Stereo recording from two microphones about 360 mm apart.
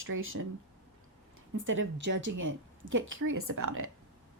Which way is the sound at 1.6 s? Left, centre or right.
Right.